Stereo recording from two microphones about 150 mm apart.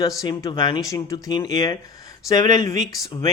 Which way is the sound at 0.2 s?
25° left (ahead or behind).